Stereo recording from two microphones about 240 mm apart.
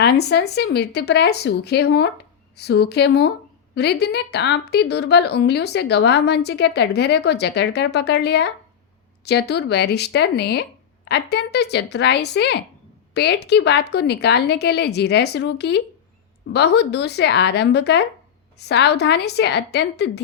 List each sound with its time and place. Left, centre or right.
0.0 s a woman's voice: left